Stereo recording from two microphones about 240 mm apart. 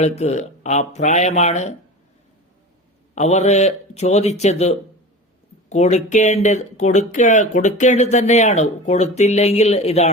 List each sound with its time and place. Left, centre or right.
0.0 s speech: left
3.2 s speech: left